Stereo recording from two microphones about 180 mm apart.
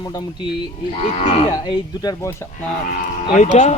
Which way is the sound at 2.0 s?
20° left (ahead or behind).